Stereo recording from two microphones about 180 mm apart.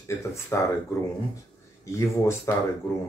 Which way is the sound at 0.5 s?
15° left (ahead or behind).